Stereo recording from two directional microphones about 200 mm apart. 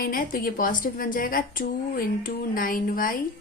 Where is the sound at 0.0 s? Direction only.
45° left (ahead or behind).